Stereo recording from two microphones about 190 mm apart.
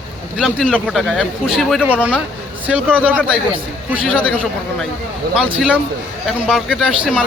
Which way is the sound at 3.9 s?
5° right (ahead or behind).